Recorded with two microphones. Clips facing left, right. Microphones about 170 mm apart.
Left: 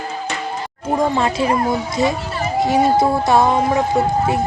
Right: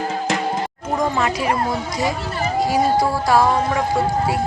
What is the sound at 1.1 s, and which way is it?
Speech, 30° left (ahead or behind).